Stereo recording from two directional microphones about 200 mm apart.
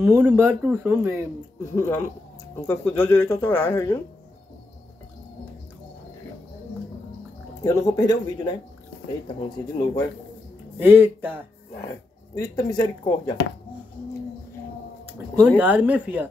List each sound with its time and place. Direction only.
0.0 s speech: 10° right (ahead or behind)
1.6 s speech: 10° left (ahead or behind)
7.6 s speech: 15° left (ahead or behind)
10.8 s speech: 10° right (ahead or behind)
12.4 s speech: 20° left (ahead or behind)
15.4 s speech: 5° right (ahead or behind)